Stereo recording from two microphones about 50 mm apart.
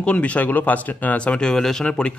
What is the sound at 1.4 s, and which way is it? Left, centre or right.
Speech, centre.